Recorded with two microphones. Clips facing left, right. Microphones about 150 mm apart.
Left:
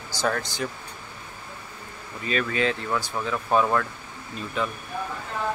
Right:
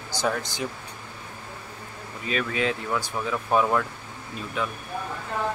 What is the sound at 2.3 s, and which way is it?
Speech, 5° right (ahead or behind).